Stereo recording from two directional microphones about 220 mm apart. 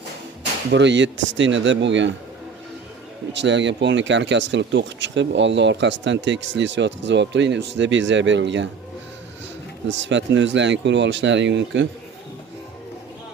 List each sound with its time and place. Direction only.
0.7 s speech: 55° right (ahead or behind)
3.3 s speech: 55° right (ahead or behind)
9.9 s speech: 55° right (ahead or behind)